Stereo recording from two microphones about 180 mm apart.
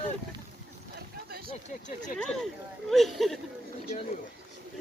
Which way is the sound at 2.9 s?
Centre (ahead or behind).